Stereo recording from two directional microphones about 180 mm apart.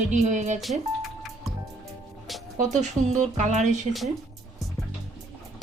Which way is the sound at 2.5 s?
40° right (ahead or behind).